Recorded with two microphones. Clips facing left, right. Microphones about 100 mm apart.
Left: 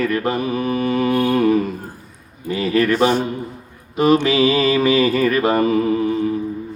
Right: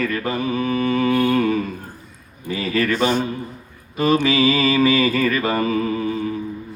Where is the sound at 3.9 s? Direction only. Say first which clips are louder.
Left 3 dB; 20° left (ahead or behind).